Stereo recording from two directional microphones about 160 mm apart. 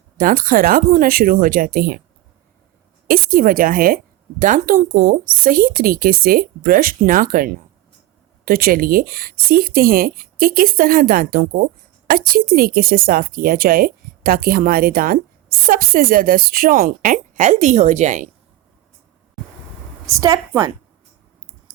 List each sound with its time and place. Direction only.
0.2 s speech: 60° right (ahead or behind)
3.1 s speech: 60° right (ahead or behind)
20.1 s a woman's voice: 20° right (ahead or behind)